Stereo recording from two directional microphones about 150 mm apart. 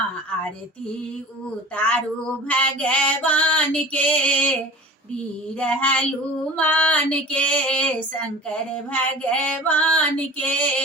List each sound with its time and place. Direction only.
2.5 s female singing: 10° left (ahead or behind)
5.5 s female singing: 10° left (ahead or behind)